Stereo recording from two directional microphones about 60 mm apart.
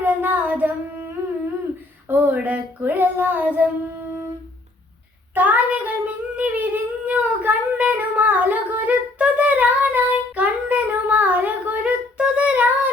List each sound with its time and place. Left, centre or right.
0.0 s singing: right
2.0 s child singing: right
5.3 s singing: right